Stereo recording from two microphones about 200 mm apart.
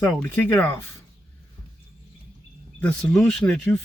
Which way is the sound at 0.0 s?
10° left (ahead or behind).